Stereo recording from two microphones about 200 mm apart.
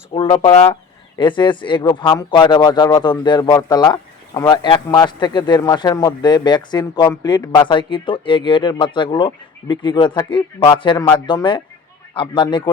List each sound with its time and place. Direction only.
0.1 s a man's voice: 25° left (ahead or behind)